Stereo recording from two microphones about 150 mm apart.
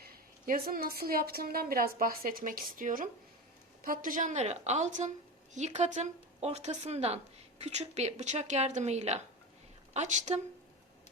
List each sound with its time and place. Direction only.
0.0 s a woman's voice: 80° right; by 10.4 s 50° right (ahead or behind)